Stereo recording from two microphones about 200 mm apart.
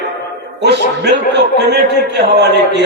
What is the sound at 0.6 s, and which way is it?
A man's voice, 60° right (ahead or behind).